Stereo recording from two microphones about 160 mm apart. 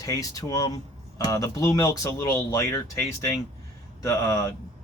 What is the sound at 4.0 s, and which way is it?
Speech, 20° left (ahead or behind).